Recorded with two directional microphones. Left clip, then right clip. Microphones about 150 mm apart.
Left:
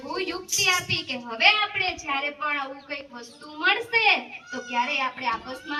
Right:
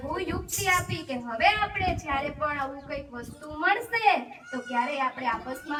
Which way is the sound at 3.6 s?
35° right (ahead or behind).